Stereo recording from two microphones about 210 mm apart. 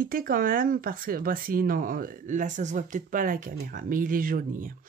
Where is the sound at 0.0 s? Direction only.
45° right (ahead or behind).